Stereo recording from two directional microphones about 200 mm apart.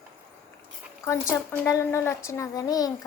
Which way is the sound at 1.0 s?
15° left (ahead or behind).